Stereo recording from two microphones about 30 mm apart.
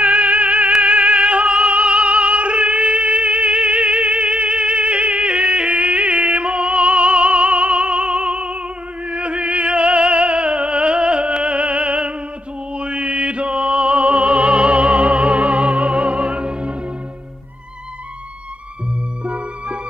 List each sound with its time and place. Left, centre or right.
0.0 s music: right
2.8 s music: right
19.2 s music: right